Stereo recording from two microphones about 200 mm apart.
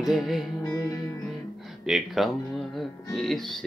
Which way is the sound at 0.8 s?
20° left (ahead or behind).